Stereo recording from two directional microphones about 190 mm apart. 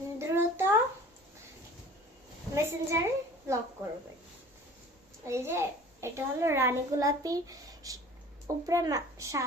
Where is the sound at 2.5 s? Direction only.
15° right (ahead or behind).